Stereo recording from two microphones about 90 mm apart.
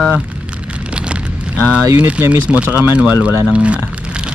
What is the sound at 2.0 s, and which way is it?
Speech, 20° right (ahead or behind).